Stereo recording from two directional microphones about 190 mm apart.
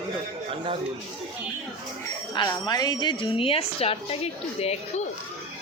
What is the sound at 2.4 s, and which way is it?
A woman's voice, 20° left (ahead or behind).